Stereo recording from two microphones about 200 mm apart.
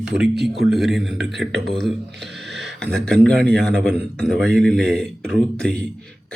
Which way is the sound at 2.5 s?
60° right (ahead or behind).